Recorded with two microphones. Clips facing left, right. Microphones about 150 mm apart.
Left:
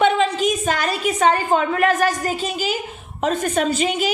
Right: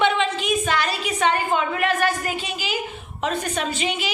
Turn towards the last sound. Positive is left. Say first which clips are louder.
# left 6 dB
turn(degrees=45)  # may be behind; listen again after turning